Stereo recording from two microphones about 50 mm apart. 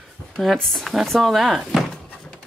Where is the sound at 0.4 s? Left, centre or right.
Centre.